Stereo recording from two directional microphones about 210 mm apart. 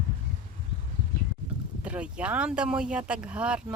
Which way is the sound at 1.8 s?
5° right (ahead or behind).